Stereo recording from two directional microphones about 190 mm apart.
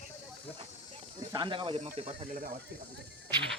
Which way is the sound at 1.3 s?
25° right (ahead or behind).